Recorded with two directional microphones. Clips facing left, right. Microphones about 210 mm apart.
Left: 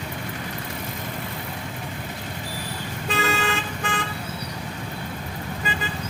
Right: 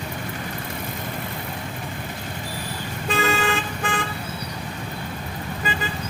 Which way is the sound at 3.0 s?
50° right (ahead or behind).